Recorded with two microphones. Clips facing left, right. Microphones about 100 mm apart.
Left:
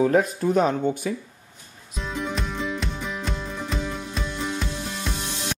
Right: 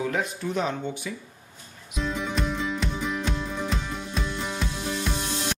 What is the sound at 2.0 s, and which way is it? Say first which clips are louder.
Music: right 1 dB; centre (ahead or behind).